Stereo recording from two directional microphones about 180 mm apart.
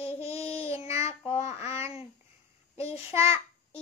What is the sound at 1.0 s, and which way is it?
Child singing, 35° left (ahead or behind).